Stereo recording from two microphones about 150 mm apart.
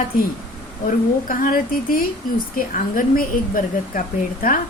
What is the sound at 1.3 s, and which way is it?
A woman's voice, 65° left (ahead or behind).